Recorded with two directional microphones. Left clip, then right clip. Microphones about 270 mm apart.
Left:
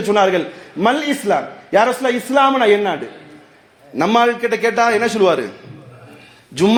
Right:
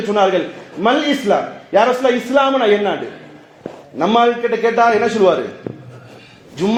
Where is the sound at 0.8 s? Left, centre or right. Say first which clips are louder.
Right 1 dB; left.